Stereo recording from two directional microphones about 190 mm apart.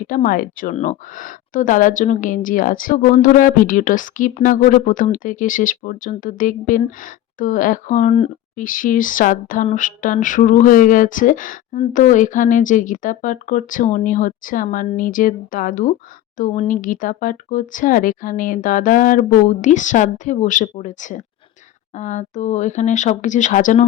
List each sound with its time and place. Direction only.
0.1 s a woman's voice: 45° left (ahead or behind)